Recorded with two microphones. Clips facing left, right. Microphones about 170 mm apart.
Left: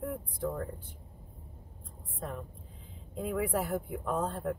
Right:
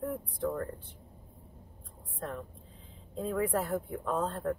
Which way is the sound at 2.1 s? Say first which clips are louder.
Right 1 dB; 10° left (ahead or behind).